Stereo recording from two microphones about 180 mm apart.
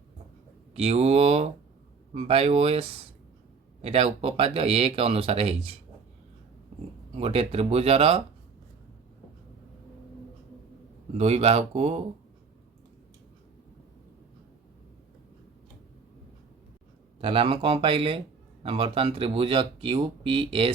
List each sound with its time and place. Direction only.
0.7 s speech: 35° right (ahead or behind)
7.2 s speech: 30° right (ahead or behind)
11.2 s speech: 35° right (ahead or behind)
17.2 s speech: 30° right (ahead or behind)